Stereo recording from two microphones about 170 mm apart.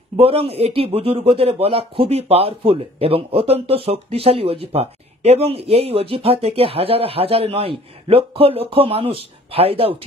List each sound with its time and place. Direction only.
0.2 s speech: 35° right (ahead or behind)